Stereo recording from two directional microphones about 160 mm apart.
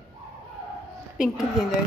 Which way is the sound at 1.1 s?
Centre (ahead or behind).